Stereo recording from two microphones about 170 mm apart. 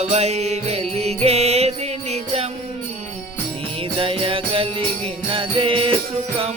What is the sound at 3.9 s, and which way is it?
Music, 30° right (ahead or behind).